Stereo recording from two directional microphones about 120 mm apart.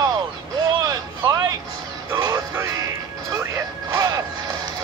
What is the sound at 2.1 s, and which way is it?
Music, 30° right (ahead or behind).